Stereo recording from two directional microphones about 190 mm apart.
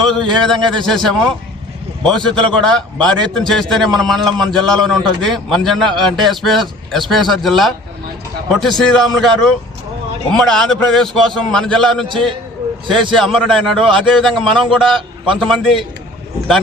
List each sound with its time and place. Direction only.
0.0 s a man's voice: centre (ahead or behind)
12.0 s a man's voice: 25° right (ahead or behind)
13.1 s a man's voice: 5° left (ahead or behind)